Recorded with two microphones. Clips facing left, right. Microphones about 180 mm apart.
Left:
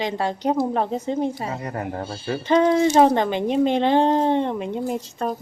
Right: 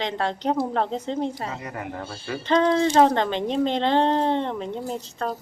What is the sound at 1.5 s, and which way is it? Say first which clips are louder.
Speech: left 4 dB; 35° left (ahead or behind).